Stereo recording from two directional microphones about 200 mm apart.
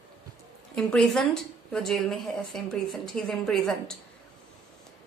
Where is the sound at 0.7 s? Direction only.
5° left (ahead or behind).